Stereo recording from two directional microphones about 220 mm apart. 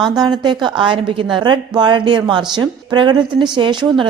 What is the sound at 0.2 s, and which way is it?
A woman's voice, 20° right (ahead or behind).